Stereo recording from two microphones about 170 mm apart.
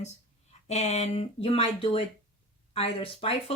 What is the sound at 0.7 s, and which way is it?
Speech, 40° left (ahead or behind).